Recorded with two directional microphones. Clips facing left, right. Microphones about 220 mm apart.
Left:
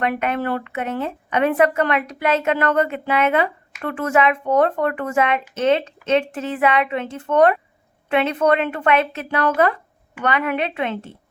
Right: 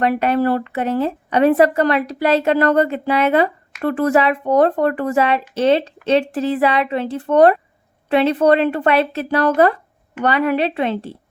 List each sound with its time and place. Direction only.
0.0 s a woman's voice: 35° right (ahead or behind)